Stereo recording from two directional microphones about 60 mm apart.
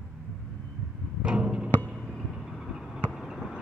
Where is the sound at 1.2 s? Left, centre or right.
Centre.